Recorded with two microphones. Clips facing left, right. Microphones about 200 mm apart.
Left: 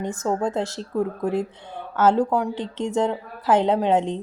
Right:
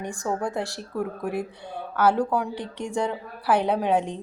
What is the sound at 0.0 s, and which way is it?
A woman's voice, 20° left (ahead or behind).